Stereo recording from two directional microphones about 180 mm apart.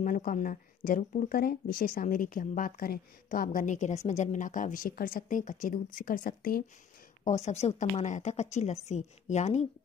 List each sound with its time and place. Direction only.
0.0 s speech: 45° left (ahead or behind)
7.2 s a woman's voice: 40° left (ahead or behind)